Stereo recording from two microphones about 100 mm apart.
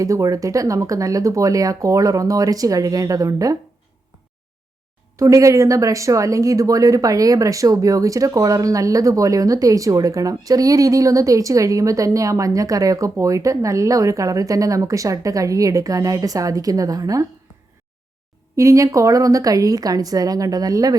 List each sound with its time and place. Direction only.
0.0 s speech: 35° right (ahead or behind)
5.1 s speech: 30° right (ahead or behind)
18.5 s speech: 30° right (ahead or behind)